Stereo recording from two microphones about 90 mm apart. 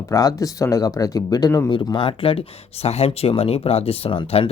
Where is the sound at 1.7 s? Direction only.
60° left (ahead or behind).